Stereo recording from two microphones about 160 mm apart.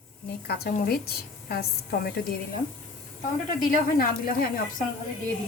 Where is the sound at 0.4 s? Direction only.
75° left (ahead or behind).